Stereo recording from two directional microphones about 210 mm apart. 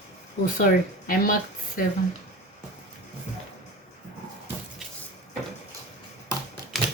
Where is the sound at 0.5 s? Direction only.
40° left (ahead or behind).